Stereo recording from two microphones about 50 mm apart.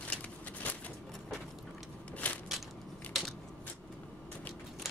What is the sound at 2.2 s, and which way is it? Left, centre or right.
Crushing, left.